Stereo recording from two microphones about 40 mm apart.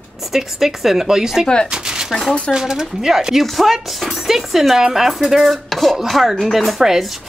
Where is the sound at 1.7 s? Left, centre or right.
Centre.